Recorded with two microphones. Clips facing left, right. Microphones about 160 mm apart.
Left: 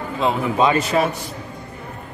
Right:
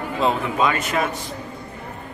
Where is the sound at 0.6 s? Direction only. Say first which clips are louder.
Left 4 dB; 30° left (ahead or behind).